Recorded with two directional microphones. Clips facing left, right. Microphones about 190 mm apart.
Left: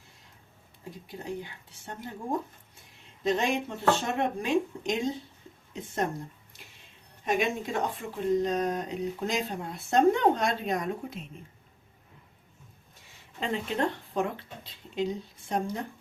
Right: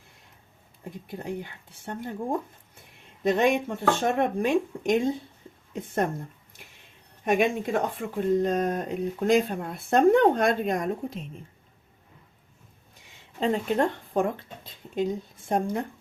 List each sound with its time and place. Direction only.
0.9 s speech: 55° right (ahead or behind)
3.2 s speech: 60° right (ahead or behind)
7.3 s speech: 55° right (ahead or behind)
13.4 s speech: 45° right (ahead or behind)